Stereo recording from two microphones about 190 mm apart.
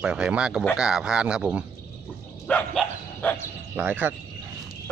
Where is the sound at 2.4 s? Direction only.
5° left (ahead or behind).